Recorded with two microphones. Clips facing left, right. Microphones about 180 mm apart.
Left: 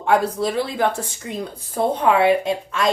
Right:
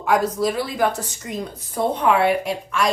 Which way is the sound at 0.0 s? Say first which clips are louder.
Left 1 dB; 25° left (ahead or behind).